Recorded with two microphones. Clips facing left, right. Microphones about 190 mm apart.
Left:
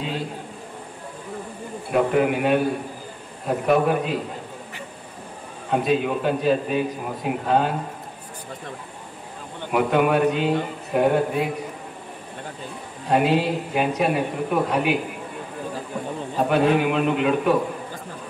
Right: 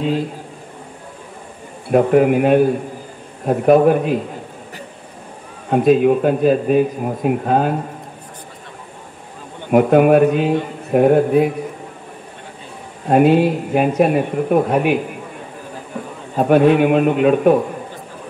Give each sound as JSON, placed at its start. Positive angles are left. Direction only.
{"t": 1.9, "sound": "a man's voice", "side_deg": -50}
{"t": 5.7, "sound": "a man's voice", "side_deg": -50}
{"t": 9.7, "sound": "a man's voice", "side_deg": -50}
{"t": 13.1, "sound": "a man's voice", "side_deg": -50}
{"t": 16.3, "sound": "a man's voice", "side_deg": -50}